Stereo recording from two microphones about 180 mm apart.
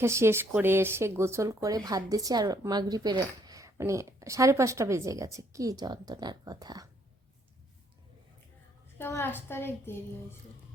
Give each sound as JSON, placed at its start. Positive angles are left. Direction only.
{"t": 0.0, "sound": "speech", "side_deg": -15}
{"t": 9.0, "sound": "a woman's voice", "side_deg": 15}